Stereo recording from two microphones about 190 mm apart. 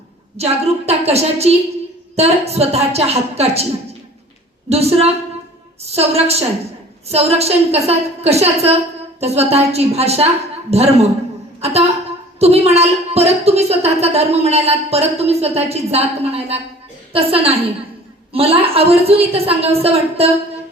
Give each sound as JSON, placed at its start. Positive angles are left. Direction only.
{"t": 0.3, "sound": "a woman's voice", "side_deg": -35}
{"t": 4.7, "sound": "a woman's voice", "side_deg": -35}
{"t": 12.4, "sound": "a woman's voice", "side_deg": -35}